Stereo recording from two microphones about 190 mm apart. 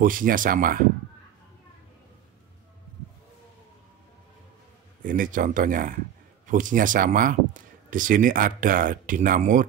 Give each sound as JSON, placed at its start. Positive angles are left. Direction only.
{"t": 0.0, "sound": "speech", "side_deg": -45}
{"t": 5.0, "sound": "speech", "side_deg": -45}